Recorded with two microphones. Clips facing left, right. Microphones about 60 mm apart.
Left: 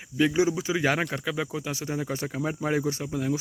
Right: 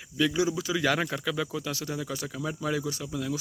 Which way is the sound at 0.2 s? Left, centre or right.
Left.